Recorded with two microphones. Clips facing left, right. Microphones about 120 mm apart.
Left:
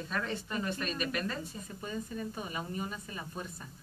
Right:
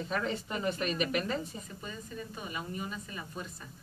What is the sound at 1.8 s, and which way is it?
A woman's voice, 35° left (ahead or behind).